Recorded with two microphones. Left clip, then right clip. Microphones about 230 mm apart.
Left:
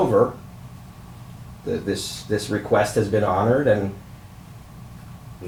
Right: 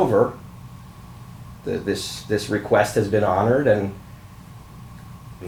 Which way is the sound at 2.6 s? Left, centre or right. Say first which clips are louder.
Right 1 dB; centre.